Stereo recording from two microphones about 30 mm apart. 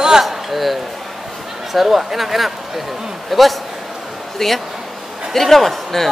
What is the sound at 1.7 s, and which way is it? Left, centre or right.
Speech, centre.